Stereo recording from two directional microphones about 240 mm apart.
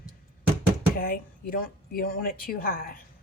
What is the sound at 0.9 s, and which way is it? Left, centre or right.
Speech, left.